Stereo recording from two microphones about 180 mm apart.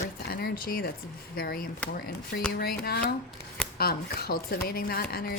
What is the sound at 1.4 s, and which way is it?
Speech, 55° left (ahead or behind).